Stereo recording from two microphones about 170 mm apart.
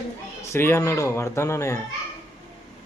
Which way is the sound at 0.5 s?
15° left (ahead or behind).